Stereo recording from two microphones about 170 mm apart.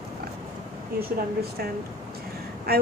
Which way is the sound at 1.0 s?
60° right (ahead or behind).